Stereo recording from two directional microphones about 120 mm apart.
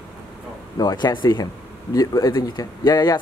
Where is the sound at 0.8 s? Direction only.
35° left (ahead or behind).